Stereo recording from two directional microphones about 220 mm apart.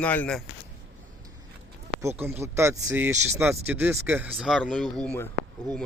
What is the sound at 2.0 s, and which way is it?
Speech, 10° right (ahead or behind).